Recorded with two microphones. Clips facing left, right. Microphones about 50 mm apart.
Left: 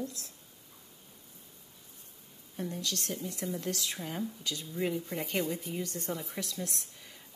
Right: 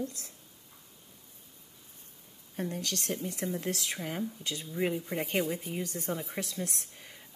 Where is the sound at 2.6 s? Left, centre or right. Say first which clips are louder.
Right 2 dB; right.